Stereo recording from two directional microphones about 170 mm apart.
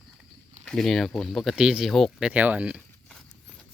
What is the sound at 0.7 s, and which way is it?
Speech, centre (ahead or behind).